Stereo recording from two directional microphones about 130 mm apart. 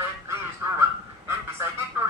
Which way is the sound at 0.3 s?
20° right (ahead or behind).